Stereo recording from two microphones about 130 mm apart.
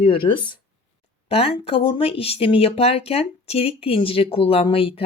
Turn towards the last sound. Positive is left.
turn(degrees=45)  # may be behind; listen again after turning